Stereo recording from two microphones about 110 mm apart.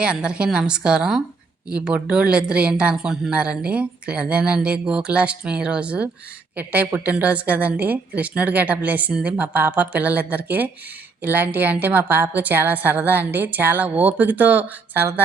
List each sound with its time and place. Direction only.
0.0 s a woman's voice: 10° right (ahead or behind)